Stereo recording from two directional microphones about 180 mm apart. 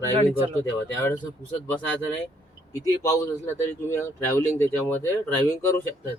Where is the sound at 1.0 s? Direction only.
15° left (ahead or behind).